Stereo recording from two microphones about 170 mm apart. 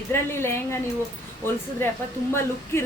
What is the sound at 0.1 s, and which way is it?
Speech, 15° left (ahead or behind).